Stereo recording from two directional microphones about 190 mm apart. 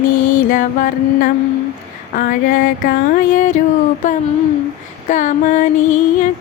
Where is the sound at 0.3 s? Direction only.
45° left (ahead or behind).